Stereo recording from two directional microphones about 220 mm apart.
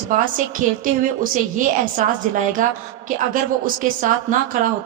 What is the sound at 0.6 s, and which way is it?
Speech, 35° right (ahead or behind).